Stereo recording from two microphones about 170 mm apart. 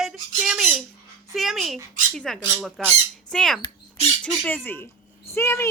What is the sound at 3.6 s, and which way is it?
Rodents, 35° left (ahead or behind).